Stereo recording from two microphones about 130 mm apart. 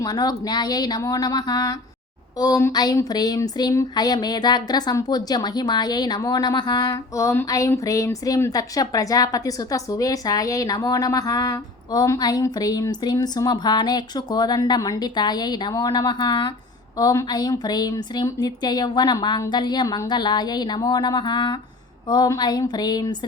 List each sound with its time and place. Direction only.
0.0 s a woman's voice: 30° left (ahead or behind)